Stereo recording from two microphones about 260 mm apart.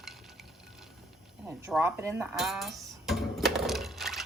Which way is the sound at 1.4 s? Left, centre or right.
Centre.